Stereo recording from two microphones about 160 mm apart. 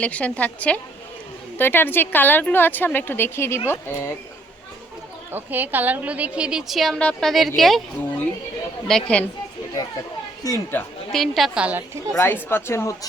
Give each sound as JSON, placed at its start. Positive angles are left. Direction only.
{"t": 0.0, "sound": "speech", "side_deg": 10}
{"t": 5.3, "sound": "a woman's voice", "side_deg": -10}
{"t": 8.9, "sound": "a woman's voice", "side_deg": 5}
{"t": 10.4, "sound": "speech", "side_deg": 20}
{"t": 10.8, "sound": "a woman's voice", "side_deg": 5}
{"t": 12.1, "sound": "speech", "side_deg": 15}